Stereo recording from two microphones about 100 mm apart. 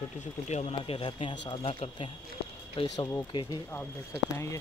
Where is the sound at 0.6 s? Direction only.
80° left.